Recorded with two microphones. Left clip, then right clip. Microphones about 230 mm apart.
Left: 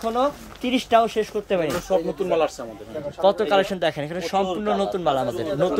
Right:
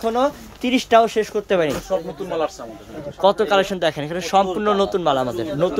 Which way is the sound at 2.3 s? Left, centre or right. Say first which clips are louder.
Left 1 dB; left.